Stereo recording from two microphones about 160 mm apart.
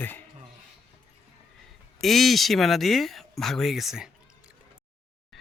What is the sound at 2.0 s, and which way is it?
Speech, centre (ahead or behind).